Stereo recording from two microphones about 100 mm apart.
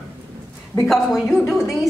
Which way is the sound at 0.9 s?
Centre (ahead or behind).